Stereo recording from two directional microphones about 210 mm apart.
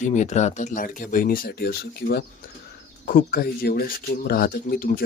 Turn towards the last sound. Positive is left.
turn(degrees=45)  # may be behind; listen again after turning